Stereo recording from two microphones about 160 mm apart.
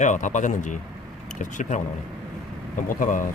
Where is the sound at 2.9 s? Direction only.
55° left (ahead or behind).